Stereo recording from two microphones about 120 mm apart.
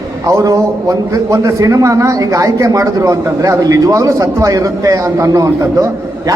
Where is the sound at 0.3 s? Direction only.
30° right (ahead or behind).